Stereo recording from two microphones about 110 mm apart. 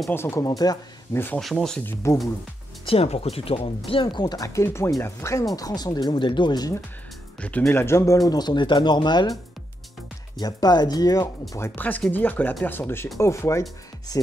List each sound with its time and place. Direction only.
0.1 s speech: 25° left (ahead or behind)
1.1 s speech: 20° left (ahead or behind)
1.4 s speech: centre (ahead or behind)
1.8 s speech: 20° left (ahead or behind)
2.9 s speech: 65° left (ahead or behind); by 6.7 s 40° left (ahead or behind)
7.3 s speech: 10° left (ahead or behind)
7.7 s speech: 25° left (ahead or behind)
8.3 s speech: 40° left (ahead or behind)
10.4 s speech: 40° left (ahead or behind)
11.5 s speech: 20° left (ahead or behind)